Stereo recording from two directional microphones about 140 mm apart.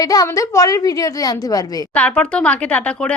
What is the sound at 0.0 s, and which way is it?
A woman's voice, 25° left (ahead or behind).